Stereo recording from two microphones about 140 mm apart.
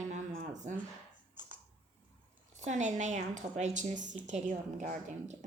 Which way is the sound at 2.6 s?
60° right (ahead or behind).